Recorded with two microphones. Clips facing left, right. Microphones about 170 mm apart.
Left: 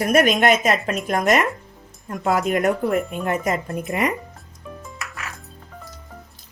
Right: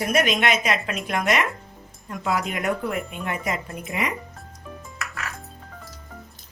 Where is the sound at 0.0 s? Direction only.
50° left (ahead or behind).